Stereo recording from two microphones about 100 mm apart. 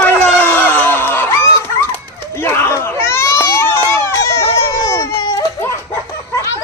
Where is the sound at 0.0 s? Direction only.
20° left (ahead or behind).